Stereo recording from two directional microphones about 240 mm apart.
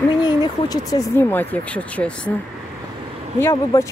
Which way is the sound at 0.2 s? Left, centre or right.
Centre.